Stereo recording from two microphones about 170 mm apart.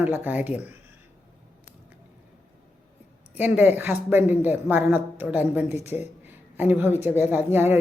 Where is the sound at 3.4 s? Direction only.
10° right (ahead or behind).